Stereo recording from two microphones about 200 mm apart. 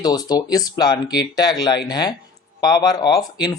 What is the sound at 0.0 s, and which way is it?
Speech, 20° left (ahead or behind).